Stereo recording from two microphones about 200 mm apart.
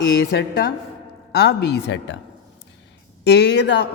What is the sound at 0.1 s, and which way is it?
A woman's voice, 50° left (ahead or behind).